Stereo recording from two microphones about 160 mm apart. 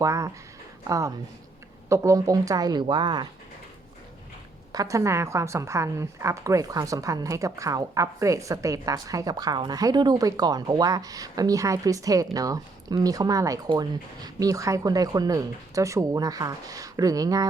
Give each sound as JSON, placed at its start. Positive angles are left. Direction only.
{"t": 0.0, "sound": "a woman's voice", "side_deg": -20}
{"t": 4.7, "sound": "a woman's voice", "side_deg": -20}